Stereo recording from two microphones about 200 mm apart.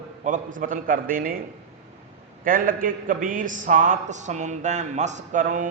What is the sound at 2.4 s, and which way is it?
A man's voice, 45° right (ahead or behind).